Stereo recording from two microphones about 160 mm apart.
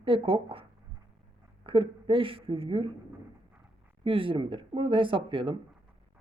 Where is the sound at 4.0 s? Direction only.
35° right (ahead or behind).